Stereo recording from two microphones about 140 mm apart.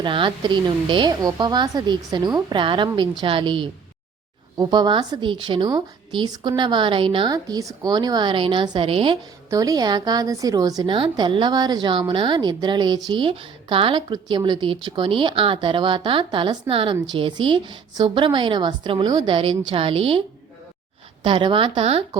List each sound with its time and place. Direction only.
0.0 s a woman's voice: 35° right (ahead or behind)
9.5 s a woman's voice: 25° right (ahead or behind)
21.2 s a woman's voice: 40° right (ahead or behind)